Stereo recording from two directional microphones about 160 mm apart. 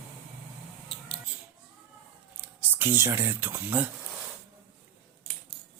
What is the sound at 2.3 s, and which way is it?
Speech, 15° right (ahead or behind).